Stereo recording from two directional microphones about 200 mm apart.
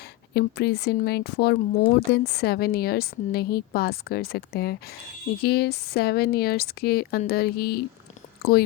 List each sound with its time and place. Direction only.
0.3 s a woman's voice: 55° left (ahead or behind)